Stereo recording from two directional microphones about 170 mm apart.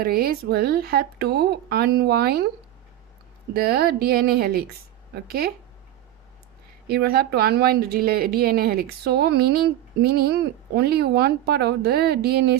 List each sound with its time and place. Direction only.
0.0 s a woman's voice: 60° right (ahead or behind)
3.5 s a woman's voice: 65° right (ahead or behind)
6.8 s a woman's voice: 65° right (ahead or behind)